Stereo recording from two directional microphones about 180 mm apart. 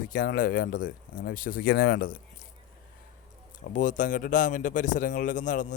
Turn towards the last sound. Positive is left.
turn(degrees=45)  # may be behind; listen again after turning